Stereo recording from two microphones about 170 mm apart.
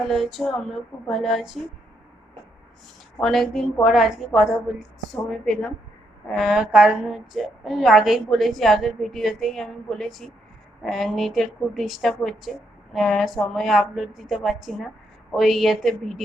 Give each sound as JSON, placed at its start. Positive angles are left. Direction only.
{"t": 0.1, "sound": "a woman's voice", "side_deg": 0}
{"t": 3.2, "sound": "a woman's voice", "side_deg": 0}